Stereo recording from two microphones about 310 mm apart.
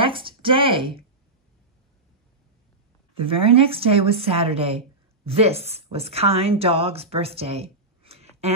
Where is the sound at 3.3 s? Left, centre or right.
Centre.